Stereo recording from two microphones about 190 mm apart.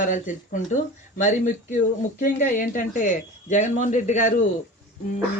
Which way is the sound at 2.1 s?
40° left (ahead or behind).